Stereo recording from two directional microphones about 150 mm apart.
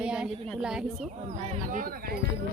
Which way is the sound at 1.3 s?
50° right (ahead or behind).